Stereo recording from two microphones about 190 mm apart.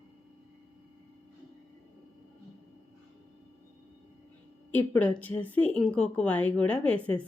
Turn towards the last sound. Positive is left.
turn(degrees=5)  # may be behind; listen again after turning